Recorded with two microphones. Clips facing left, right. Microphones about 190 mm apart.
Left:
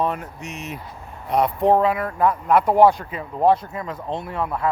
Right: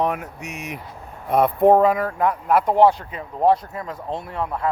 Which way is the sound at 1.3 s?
55° right (ahead or behind).